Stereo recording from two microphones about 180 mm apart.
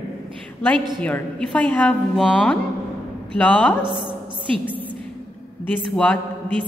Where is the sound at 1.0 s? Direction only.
10° left (ahead or behind).